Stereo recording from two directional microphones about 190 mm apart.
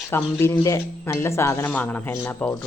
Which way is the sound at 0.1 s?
15° left (ahead or behind).